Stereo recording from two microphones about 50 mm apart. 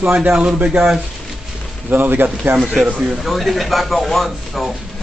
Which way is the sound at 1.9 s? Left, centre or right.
Right.